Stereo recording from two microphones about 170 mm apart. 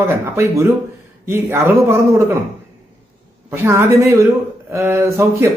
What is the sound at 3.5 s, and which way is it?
Speech, 15° right (ahead or behind).